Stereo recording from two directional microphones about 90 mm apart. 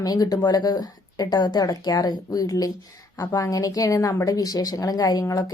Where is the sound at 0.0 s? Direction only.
45° left (ahead or behind).